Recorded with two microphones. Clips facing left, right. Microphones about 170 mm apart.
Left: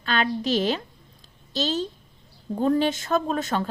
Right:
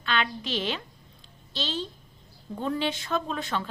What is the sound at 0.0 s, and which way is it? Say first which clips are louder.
A woman's voice: left 5 dB; 40° left (ahead or behind).